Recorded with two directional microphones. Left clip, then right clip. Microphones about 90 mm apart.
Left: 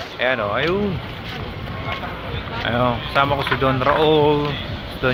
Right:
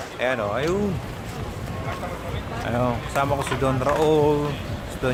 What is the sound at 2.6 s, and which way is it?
Speech, 10° left (ahead or behind).